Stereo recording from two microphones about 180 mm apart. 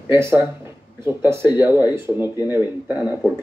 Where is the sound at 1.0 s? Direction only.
15° right (ahead or behind).